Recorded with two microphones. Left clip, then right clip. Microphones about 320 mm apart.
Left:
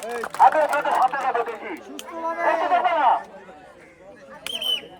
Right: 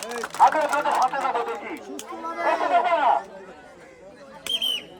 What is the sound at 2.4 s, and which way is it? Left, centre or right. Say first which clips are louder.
Speech: left 1 dB; centre.